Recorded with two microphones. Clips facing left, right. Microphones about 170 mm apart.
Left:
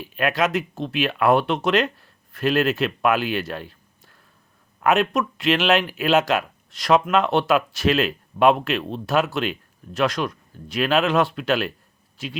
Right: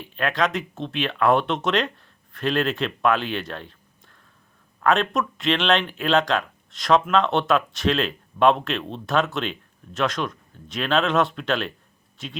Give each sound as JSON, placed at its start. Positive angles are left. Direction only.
{"t": 0.0, "sound": "speech", "side_deg": 10}